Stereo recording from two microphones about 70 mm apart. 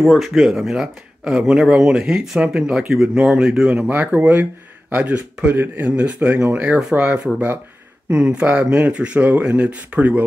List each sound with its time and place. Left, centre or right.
0.0 s speech: centre
3.9 s speech: right
6.8 s speech: centre